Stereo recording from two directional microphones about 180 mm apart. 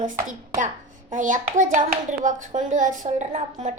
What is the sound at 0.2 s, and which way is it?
Speech, 45° right (ahead or behind).